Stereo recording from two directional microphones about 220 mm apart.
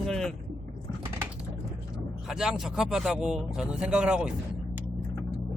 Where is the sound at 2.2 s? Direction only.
Centre (ahead or behind).